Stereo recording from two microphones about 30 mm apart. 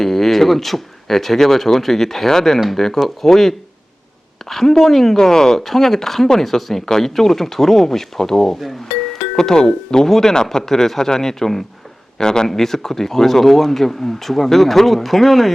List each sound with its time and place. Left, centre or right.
0.0 s a woman's voice: centre
5.1 s speech: centre
5.6 s speech: centre
12.5 s speech: centre